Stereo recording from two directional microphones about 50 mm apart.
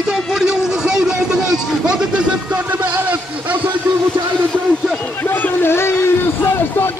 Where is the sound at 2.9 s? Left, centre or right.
Right.